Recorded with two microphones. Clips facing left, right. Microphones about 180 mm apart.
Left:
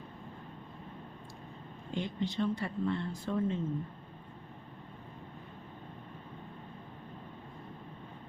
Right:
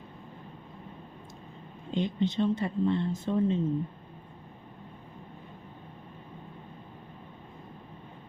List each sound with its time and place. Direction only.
1.9 s speech: 20° right (ahead or behind)